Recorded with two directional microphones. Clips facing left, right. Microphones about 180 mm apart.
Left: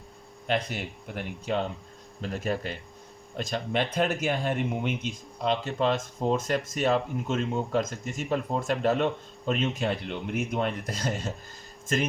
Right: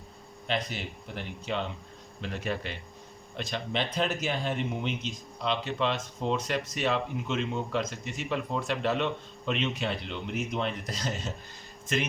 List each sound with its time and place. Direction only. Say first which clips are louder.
0.4 s speech: left 3 dB; 50° left (ahead or behind)